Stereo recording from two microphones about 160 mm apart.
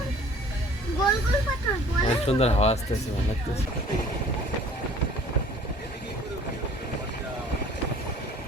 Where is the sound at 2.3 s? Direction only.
40° left (ahead or behind).